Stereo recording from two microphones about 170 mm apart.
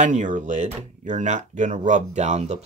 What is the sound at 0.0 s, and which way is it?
Speech, 45° right (ahead or behind).